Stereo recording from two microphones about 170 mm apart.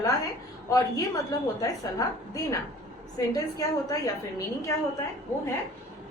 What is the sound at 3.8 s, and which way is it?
Speech, 20° left (ahead or behind).